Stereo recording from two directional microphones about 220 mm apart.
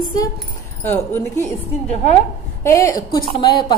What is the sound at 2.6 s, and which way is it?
A woman's voice, 15° left (ahead or behind).